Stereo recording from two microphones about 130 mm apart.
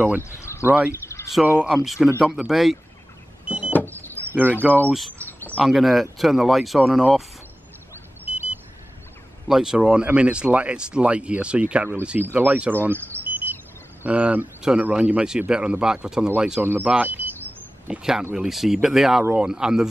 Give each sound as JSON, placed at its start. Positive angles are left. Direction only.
{"t": 0.2, "sound": "speech", "side_deg": 20}
{"t": 0.7, "sound": "speech", "side_deg": -15}
{"t": 1.0, "sound": "a sound", "side_deg": 20}
{"t": 1.5, "sound": "speech", "side_deg": -10}
{"t": 3.4, "sound": "power windows", "side_deg": -10}
{"t": 3.7, "sound": "power windows", "side_deg": 15}
{"t": 4.3, "sound": "speech", "side_deg": -15}
{"t": 5.6, "sound": "speech", "side_deg": 0}
{"t": 9.5, "sound": "speech", "side_deg": -5}